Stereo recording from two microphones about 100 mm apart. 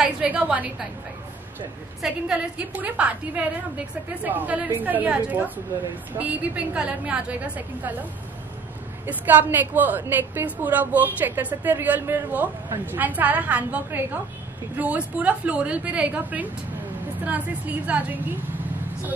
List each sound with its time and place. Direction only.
0.0 s a woman's voice: 15° right (ahead or behind)
2.0 s a woman's voice: 5° right (ahead or behind)